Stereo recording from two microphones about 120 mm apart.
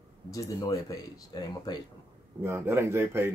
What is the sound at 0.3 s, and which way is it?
Speech, 30° left (ahead or behind).